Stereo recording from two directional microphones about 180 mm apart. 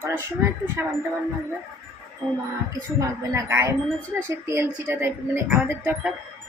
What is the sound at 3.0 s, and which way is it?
Speech, 15° right (ahead or behind).